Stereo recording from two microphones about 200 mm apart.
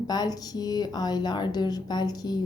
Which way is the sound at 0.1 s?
20° left (ahead or behind).